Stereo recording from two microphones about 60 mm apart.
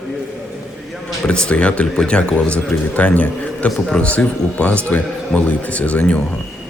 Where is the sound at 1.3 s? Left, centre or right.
Centre.